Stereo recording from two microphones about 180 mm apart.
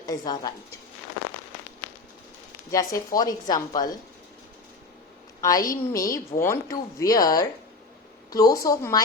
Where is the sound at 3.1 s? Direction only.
20° left (ahead or behind).